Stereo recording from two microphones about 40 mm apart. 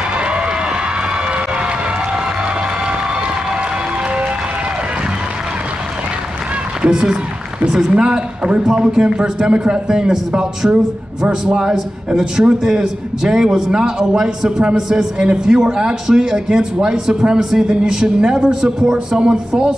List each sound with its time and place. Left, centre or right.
6.9 s a man's voice: centre